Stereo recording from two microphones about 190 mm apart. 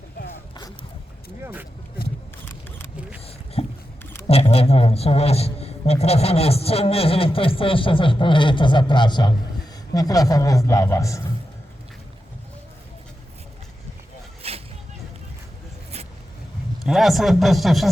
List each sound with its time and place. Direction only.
1.4 s speech: 10° right (ahead or behind)
3.2 s a sound: 30° left (ahead or behind)
4.3 s a man's voice: 30° left (ahead or behind); by 11.2 s 15° left (ahead or behind)
14.4 s music: 30° right (ahead or behind)
16.8 s a man's voice: centre (ahead or behind)